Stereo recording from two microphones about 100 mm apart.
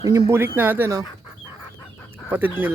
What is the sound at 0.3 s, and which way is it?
Speech, 20° right (ahead or behind).